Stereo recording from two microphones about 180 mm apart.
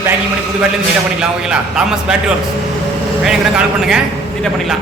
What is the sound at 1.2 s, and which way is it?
A man's voice, 5° right (ahead or behind).